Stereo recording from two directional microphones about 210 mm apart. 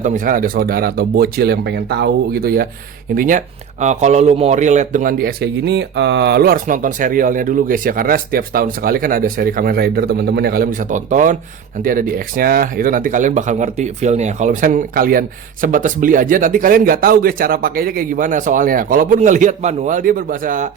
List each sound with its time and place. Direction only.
0.0 s speech: 40° right (ahead or behind)